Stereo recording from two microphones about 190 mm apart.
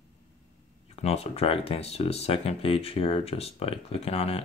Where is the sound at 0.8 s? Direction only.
35° left (ahead or behind).